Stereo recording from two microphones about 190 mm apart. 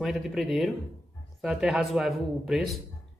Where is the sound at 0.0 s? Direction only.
Centre (ahead or behind).